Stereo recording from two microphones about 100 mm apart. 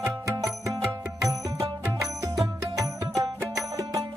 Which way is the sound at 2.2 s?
35° right (ahead or behind).